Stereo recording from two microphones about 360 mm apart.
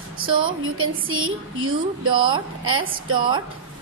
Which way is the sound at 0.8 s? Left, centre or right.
Right.